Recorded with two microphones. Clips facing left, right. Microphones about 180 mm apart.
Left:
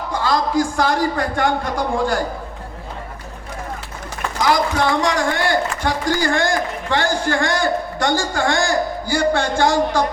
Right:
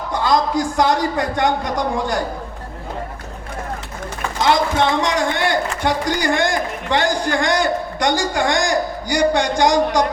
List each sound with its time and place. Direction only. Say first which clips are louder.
0.1 s a man's voice: right 2 dB; 20° right (ahead or behind)
4.4 s a man's voice: right 1 dB; 25° right (ahead or behind)